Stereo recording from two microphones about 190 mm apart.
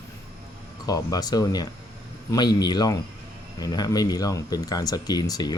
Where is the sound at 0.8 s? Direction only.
20° left (ahead or behind).